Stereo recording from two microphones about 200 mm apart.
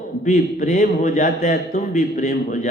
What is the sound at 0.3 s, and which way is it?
Speech, 40° left (ahead or behind).